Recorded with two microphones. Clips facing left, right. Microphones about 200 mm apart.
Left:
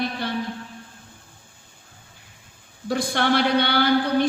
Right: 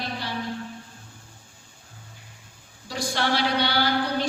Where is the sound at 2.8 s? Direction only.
55° left (ahead or behind).